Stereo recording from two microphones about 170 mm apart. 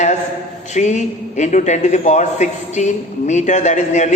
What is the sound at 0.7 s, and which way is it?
A man's voice, 45° left (ahead or behind).